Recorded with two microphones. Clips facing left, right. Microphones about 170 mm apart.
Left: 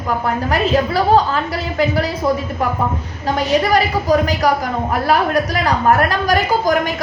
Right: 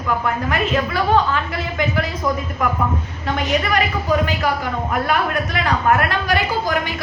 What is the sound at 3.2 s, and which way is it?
A woman's voice, 35° left (ahead or behind).